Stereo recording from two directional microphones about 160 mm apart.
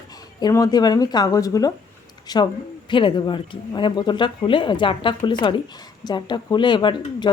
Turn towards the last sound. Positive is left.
turn(degrees=30)  # may be behind; listen again after turning